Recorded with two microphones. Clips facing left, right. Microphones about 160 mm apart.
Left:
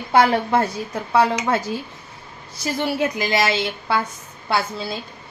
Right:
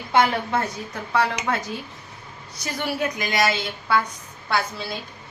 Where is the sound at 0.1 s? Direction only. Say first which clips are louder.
Left 4 dB; 35° left (ahead or behind).